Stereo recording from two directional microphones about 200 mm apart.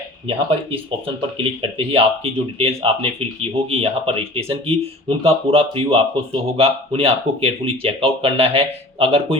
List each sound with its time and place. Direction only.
0.3 s speech: 25° right (ahead or behind)